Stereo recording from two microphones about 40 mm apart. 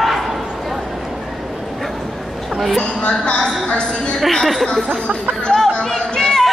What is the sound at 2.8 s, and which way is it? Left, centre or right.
Speech, left.